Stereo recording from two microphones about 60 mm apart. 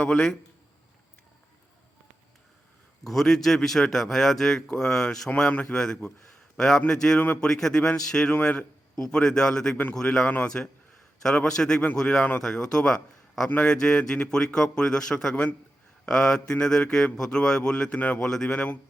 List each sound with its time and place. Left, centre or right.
0.0 s speech: centre
3.0 s speech: centre
8.3 s speech: left
10.2 s speech: left
11.2 s speech: centre
18.2 s speech: centre
18.4 s speech: centre